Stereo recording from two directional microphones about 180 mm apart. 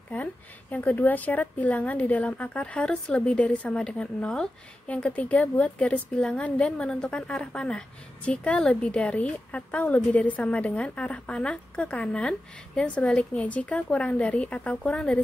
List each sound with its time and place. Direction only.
0.1 s a woman's voice: 10° left (ahead or behind)